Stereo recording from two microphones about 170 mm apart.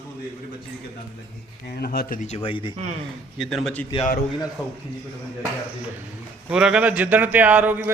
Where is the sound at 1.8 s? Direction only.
60° left (ahead or behind).